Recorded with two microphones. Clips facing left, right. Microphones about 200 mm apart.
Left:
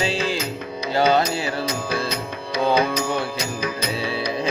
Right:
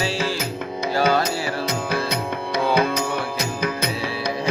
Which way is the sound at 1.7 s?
55° right (ahead or behind).